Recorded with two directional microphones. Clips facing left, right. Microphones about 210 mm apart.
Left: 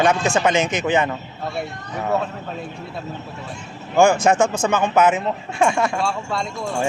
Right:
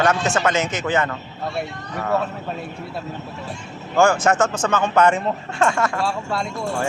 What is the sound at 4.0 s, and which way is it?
Speech, 15° left (ahead or behind).